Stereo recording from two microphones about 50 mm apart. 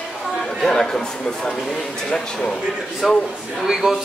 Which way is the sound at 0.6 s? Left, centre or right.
Centre.